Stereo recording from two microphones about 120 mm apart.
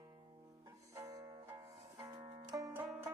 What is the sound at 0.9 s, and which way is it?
Music, 25° right (ahead or behind).